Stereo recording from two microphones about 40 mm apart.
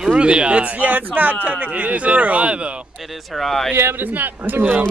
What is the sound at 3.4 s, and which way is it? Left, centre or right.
Speech, centre.